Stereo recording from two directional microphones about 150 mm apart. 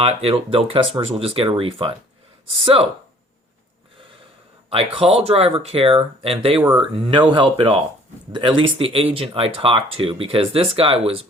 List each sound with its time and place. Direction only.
0.0 s speech: 45° right (ahead or behind)
4.7 s speech: 40° right (ahead or behind)
6.6 s speech: 10° right (ahead or behind)
7.1 s speech: 35° right (ahead or behind)